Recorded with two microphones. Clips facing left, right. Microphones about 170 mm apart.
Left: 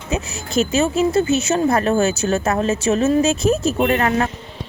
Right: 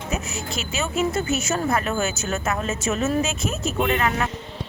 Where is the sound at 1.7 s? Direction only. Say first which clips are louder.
Left 7 dB; 35° left (ahead or behind).